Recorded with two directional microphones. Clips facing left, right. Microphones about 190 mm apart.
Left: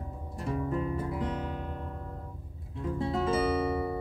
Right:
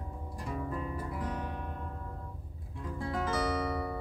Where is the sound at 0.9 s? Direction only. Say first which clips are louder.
Left 4 dB; 25° left (ahead or behind).